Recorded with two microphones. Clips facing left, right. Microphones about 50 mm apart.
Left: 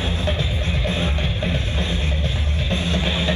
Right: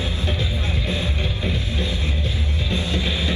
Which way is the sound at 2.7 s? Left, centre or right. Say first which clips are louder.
Left 2 dB; left.